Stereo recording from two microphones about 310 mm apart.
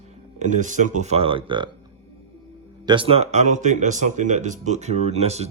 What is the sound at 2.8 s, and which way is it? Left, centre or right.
Speech, centre.